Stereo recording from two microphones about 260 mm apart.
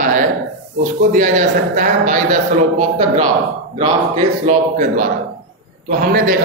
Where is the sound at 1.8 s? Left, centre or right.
Right.